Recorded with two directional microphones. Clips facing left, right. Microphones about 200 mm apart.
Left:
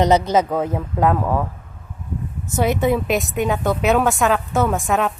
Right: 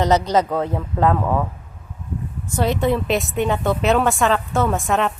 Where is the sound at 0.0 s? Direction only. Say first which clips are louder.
Left 1 dB; 15° left (ahead or behind).